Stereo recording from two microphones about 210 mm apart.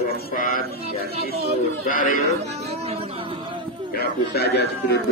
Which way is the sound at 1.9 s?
40° left (ahead or behind).